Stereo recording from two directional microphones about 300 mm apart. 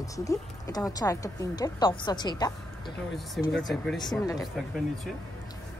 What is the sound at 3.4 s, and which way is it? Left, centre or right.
Speech, centre.